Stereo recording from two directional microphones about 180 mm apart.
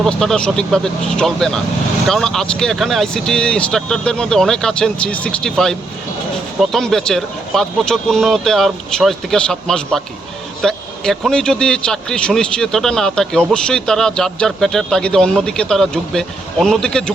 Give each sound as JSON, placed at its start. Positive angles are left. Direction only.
{"t": 0.0, "sound": "a man's voice", "side_deg": 5}